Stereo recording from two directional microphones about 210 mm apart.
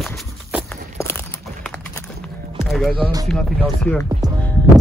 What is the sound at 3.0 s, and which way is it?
Speech, 15° right (ahead or behind).